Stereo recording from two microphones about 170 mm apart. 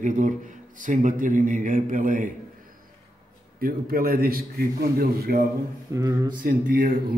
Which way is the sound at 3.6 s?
60° right (ahead or behind).